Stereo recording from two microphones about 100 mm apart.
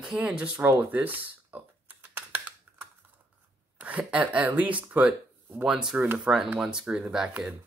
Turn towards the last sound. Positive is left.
turn(degrees=-5)  # may be behind; listen again after turning